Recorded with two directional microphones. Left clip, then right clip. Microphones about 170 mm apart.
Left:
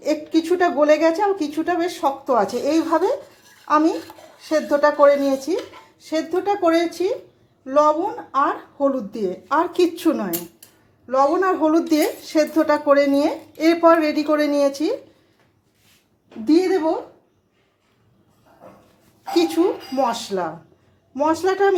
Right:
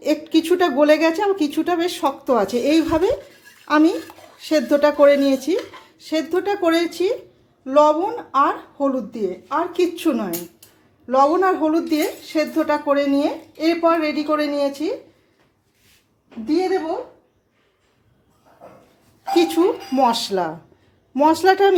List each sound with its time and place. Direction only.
0.0 s a woman's voice: 15° right (ahead or behind)
9.1 s a child's voice: 15° left (ahead or behind)
9.9 s speech: centre (ahead or behind)
11.0 s speech: 20° right (ahead or behind)
11.4 s speech: centre (ahead or behind)
11.9 s a child's voice: 15° left (ahead or behind)
16.5 s a woman's voice: 55° left (ahead or behind)
19.3 s speech: 15° right (ahead or behind)